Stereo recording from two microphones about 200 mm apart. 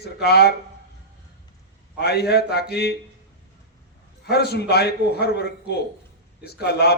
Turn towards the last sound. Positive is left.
turn(degrees=55)  # may be behind; listen again after turning